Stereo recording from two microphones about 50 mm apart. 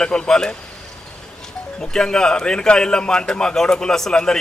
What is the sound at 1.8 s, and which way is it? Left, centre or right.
A man's voice, centre.